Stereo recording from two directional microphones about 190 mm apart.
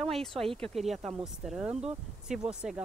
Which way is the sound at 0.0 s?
Centre (ahead or behind).